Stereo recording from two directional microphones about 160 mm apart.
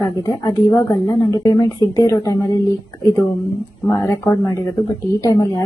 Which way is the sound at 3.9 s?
15° left (ahead or behind).